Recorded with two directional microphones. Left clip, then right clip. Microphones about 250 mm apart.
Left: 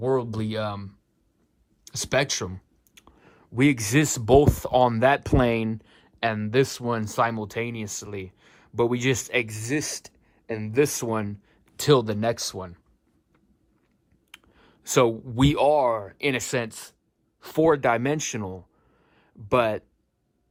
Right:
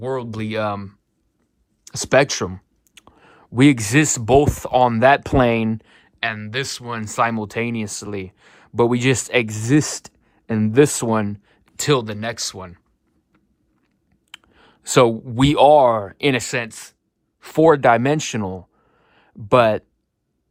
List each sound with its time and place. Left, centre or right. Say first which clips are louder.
0.0 s speech: even; left
1.9 s clicking: right 8 dB; centre
3.9 s speech: right 4 dB; centre
14.3 s speech: right 7 dB; centre
17.4 s speech: right 7 dB; centre